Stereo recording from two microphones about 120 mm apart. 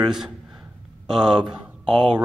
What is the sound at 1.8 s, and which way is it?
Speech, 40° right (ahead or behind).